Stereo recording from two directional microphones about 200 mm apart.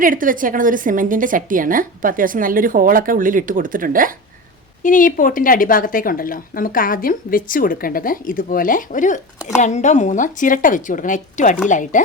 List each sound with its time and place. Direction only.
0.0 s a woman's voice: 45° right (ahead or behind)
4.8 s a woman's voice: 40° left (ahead or behind)